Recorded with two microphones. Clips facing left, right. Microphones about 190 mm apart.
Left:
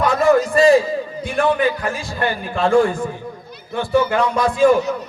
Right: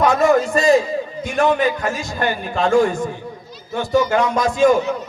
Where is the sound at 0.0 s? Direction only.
35° left (ahead or behind).